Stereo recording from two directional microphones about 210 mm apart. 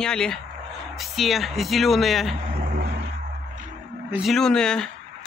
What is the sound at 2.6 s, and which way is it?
Vehicle, 45° right (ahead or behind).